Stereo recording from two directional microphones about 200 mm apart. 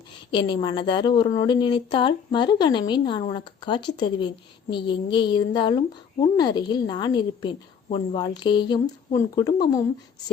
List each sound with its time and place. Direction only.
0.3 s a woman's voice: 25° left (ahead or behind)